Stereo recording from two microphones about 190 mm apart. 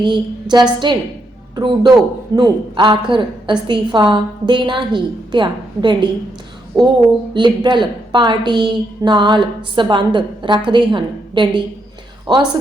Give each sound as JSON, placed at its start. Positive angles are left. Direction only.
{"t": 0.0, "sound": "a woman's voice", "side_deg": -25}
{"t": 6.8, "sound": "speech", "side_deg": 0}
{"t": 7.3, "sound": "a woman's voice", "side_deg": -25}